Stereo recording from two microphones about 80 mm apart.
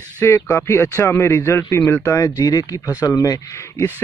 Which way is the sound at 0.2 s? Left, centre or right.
Left.